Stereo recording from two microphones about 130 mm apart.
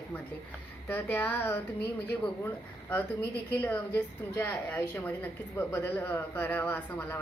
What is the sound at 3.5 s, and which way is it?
A woman's voice, 15° left (ahead or behind).